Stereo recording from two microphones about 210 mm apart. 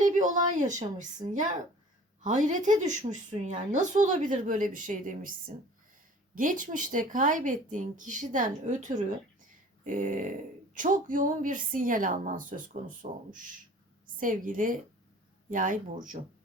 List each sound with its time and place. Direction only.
0.0 s a woman's voice: 35° right (ahead or behind)
6.3 s a woman's voice: 40° right (ahead or behind)